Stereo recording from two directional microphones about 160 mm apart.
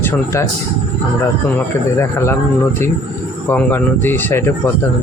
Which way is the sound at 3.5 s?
10° left (ahead or behind).